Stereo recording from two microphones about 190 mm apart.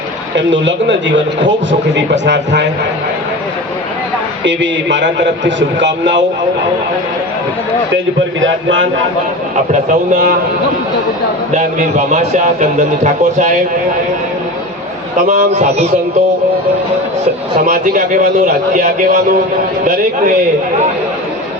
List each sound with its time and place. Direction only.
0.3 s a man's voice: 70° right (ahead or behind)
4.4 s a man's voice: 70° right (ahead or behind)
8.4 s a man's voice: 85° right
10.1 s speech: 45° right (ahead or behind)
11.5 s a man's voice: 40° right (ahead or behind)
15.3 s a man's voice: 35° right (ahead or behind)
17.7 s speech: 45° right (ahead or behind)